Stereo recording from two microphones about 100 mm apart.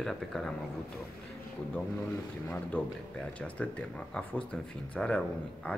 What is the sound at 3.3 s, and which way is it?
Speech, 10° left (ahead or behind).